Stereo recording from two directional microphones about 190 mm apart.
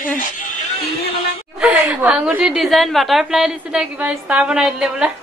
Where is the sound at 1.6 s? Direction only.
5° right (ahead or behind).